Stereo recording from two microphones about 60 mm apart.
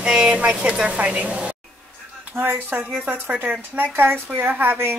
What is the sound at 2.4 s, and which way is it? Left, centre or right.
Speech, right.